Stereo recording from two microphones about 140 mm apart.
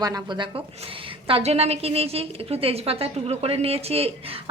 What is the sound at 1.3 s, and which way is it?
A woman's voice, 45° right (ahead or behind).